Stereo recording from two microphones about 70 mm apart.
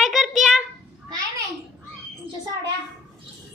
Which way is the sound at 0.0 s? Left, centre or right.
Centre.